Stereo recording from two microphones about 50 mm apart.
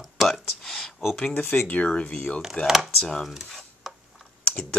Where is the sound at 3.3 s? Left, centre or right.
Centre.